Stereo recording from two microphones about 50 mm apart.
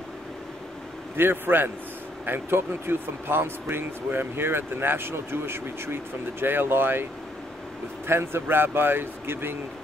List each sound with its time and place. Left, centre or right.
1.1 s speech: right
8.1 s speech: right